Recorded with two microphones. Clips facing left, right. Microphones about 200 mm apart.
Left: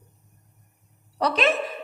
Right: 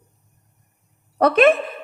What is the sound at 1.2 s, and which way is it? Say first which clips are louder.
Speech: right 8 dB; 55° right (ahead or behind).